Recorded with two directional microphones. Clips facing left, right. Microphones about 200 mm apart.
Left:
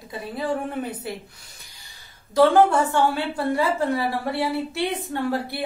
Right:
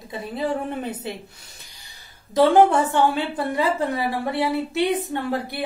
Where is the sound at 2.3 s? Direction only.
20° right (ahead or behind).